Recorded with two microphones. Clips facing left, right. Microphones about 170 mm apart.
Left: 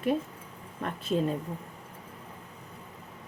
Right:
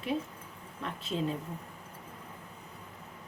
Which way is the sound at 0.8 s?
50° left (ahead or behind).